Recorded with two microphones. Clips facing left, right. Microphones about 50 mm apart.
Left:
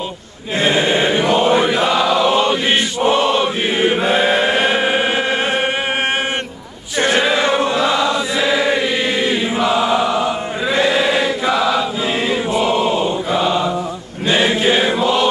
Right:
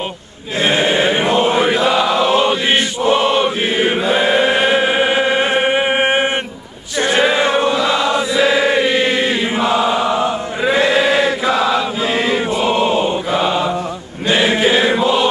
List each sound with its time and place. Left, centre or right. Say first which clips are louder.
0.7 s a sound: right 1 dB; centre
1.1 s chant: even; right
1.4 s chant: even; centre
13.3 s mantra: left 1 dB; centre
14.6 s music: right 1 dB; centre
14.9 s chant: right 1 dB; centre